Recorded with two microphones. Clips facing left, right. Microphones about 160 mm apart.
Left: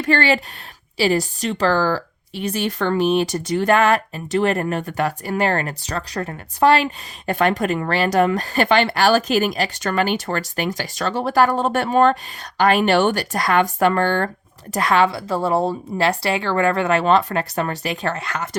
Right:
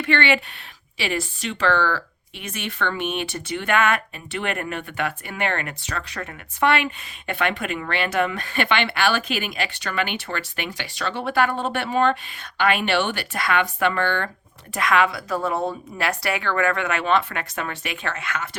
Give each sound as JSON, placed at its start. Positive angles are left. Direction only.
{"t": 0.0, "sound": "speech", "side_deg": 40}